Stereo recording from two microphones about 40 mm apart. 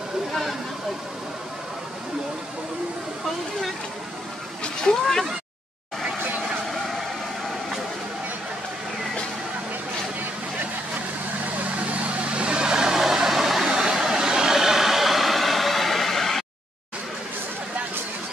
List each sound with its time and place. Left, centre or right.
0.3 s a sound: centre
4.9 s speech: centre
11.8 s vehicle: right
12.3 s vehicle: right; by 13.7 s centre
13.7 s vehicle: centre